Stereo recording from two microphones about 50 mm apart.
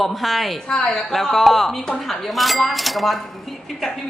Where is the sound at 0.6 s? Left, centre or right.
Centre.